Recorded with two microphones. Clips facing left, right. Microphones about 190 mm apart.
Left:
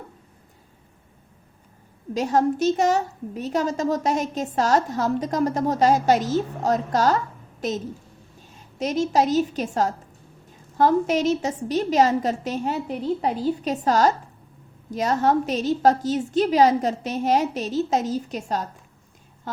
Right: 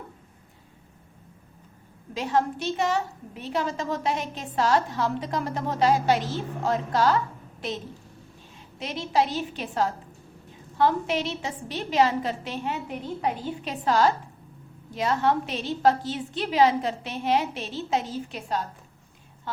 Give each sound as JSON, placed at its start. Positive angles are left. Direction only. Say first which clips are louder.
{"t": 2.1, "sound": "a woman's voice", "louder": "left 5 dB", "side_deg": 40}